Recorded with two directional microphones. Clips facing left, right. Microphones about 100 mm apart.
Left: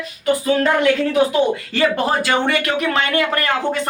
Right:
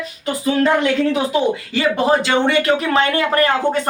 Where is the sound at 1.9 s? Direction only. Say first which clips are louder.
Right 2 dB; 25° right (ahead or behind).